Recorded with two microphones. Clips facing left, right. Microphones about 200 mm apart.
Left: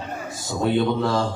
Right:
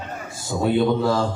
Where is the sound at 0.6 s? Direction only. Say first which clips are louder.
Right 2 dB; 5° right (ahead or behind).